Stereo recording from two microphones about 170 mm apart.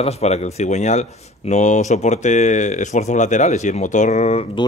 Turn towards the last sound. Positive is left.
turn(degrees=40)  # may be behind; listen again after turning